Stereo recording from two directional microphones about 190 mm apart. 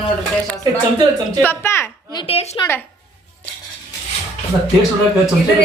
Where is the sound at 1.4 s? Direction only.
10° left (ahead or behind).